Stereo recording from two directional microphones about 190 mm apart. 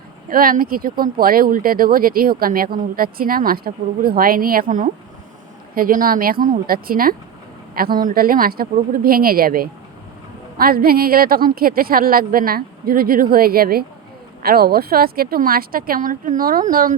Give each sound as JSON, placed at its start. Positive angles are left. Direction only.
{"t": 0.3, "sound": "speech", "side_deg": -50}